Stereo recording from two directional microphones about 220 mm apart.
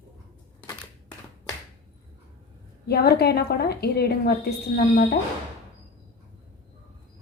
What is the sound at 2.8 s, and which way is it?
A woman's voice, 45° left (ahead or behind).